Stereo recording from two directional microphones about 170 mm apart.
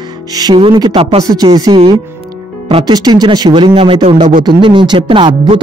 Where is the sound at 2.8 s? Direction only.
25° right (ahead or behind).